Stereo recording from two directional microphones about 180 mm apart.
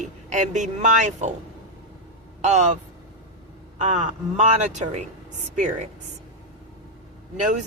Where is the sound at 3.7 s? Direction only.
40° right (ahead or behind).